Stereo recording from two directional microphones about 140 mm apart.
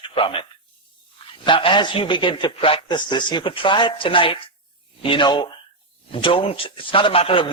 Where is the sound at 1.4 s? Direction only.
35° left (ahead or behind).